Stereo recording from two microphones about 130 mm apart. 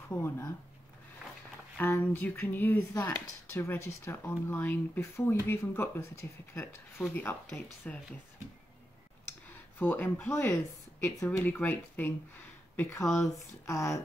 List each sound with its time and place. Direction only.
0.1 s speech: 20° left (ahead or behind)
1.8 s speech: 15° left (ahead or behind)
9.5 s speech: 15° left (ahead or behind)
13.7 s speech: 25° left (ahead or behind)